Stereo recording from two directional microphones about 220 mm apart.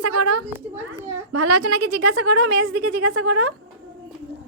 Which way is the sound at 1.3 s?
90° right.